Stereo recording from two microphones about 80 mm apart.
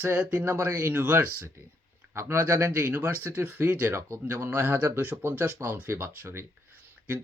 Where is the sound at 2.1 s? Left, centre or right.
Right.